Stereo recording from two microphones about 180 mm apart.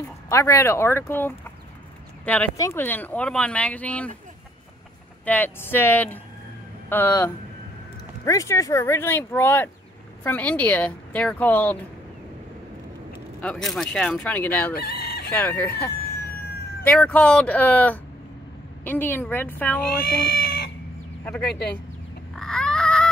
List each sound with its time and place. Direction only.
0.3 s speech: 15° left (ahead or behind)
5.2 s speech: 10° left (ahead or behind)
13.4 s speech: 5° left (ahead or behind)
14.8 s chicken: 60° left (ahead or behind)
15.3 s speech: 10° left (ahead or behind)
20.1 s cat: 70° left (ahead or behind)
21.2 s speech: 10° left (ahead or behind)
22.3 s a sound: 5° left (ahead or behind)